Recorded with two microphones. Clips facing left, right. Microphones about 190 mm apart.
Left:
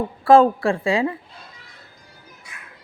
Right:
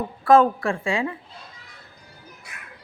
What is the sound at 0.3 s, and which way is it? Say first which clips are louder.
Speech: left 3 dB; 30° left (ahead or behind).